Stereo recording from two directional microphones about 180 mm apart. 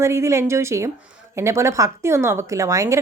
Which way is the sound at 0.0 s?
15° right (ahead or behind).